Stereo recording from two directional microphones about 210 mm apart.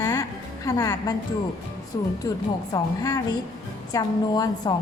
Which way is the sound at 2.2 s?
20° left (ahead or behind).